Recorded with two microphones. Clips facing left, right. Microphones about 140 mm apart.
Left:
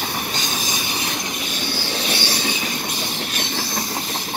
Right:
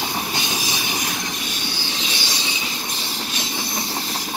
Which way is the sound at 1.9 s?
65° left (ahead or behind).